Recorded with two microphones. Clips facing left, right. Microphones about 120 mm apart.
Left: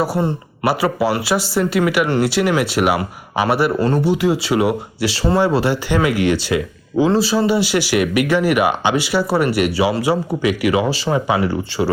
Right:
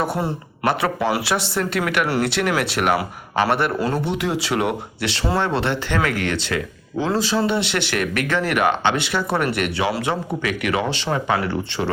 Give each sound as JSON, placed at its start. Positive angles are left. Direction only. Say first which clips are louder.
{"t": 0.0, "sound": "speech", "louder": "left 4 dB", "side_deg": 0}
{"t": 3.8, "sound": "speech", "louder": "left 6 dB", "side_deg": -5}